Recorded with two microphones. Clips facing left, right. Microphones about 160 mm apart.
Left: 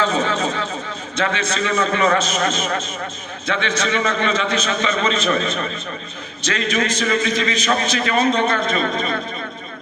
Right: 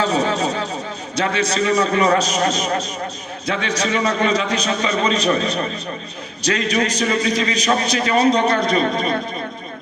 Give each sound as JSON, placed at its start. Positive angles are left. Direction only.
{"t": 0.0, "sound": "a man's voice", "side_deg": -35}